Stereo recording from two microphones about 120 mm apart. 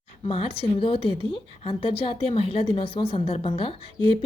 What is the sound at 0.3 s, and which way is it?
A woman's voice, 50° left (ahead or behind).